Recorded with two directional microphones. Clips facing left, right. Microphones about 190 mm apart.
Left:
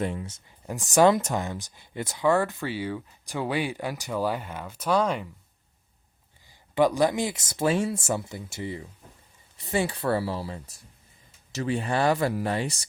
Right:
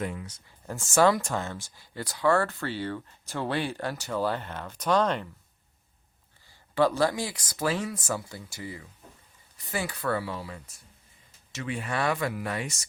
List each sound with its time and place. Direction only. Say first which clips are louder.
0.0 s speech: left 4 dB; 30° left (ahead or behind); by 5.3 s 10° left (ahead or behind)
6.5 s speech: left 2 dB; 15° left (ahead or behind); by 12.8 s 30° left (ahead or behind)